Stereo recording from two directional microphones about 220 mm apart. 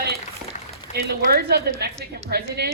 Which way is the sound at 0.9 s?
45° right (ahead or behind).